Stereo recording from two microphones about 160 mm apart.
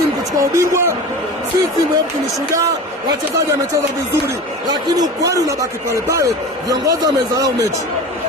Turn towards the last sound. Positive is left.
turn(degrees=-20)  # may be behind; listen again after turning